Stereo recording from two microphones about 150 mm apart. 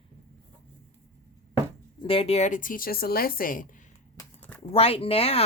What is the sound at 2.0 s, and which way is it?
Speech, 40° left (ahead or behind).